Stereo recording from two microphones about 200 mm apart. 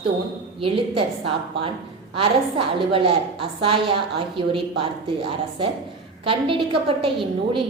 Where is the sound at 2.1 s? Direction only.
25° right (ahead or behind).